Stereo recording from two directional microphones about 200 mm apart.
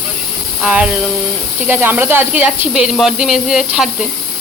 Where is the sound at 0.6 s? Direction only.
5° right (ahead or behind).